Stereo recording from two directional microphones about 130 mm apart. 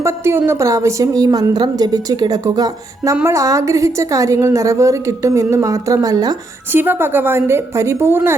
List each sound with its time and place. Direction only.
0.0 s a woman's voice: 20° right (ahead or behind)
6.7 s a woman's voice: 15° right (ahead or behind)